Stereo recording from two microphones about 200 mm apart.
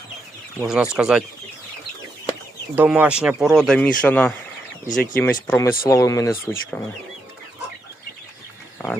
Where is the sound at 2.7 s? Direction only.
10° right (ahead or behind); by 4.4 s 10° left (ahead or behind).